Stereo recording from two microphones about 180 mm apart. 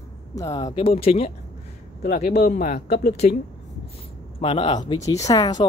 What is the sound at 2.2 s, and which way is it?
Speech, 60° left (ahead or behind).